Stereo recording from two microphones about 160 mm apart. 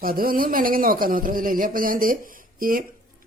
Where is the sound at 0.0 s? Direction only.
65° right (ahead or behind).